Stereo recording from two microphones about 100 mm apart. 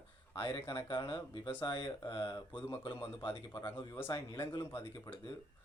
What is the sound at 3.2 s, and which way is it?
Speech, 45° left (ahead or behind).